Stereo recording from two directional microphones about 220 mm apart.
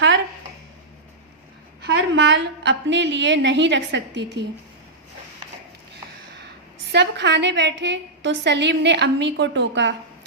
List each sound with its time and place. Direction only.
1.8 s a woman's voice: 55° right (ahead or behind)
6.9 s a woman's voice: 50° right (ahead or behind)